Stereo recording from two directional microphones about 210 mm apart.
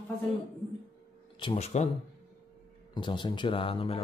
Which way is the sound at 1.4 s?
25° left (ahead or behind).